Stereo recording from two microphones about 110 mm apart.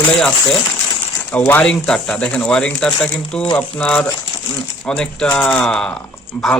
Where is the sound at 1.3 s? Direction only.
20° left (ahead or behind).